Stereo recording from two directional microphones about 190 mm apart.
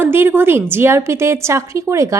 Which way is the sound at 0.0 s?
10° right (ahead or behind).